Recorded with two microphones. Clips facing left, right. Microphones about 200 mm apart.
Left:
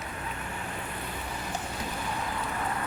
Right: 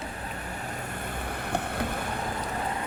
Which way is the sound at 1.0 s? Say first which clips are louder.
Right 2 dB; 55° right (ahead or behind).